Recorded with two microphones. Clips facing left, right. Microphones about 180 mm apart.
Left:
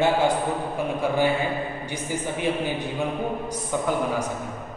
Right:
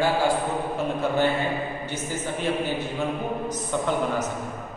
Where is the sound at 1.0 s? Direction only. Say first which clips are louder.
Left 1 dB; 10° left (ahead or behind).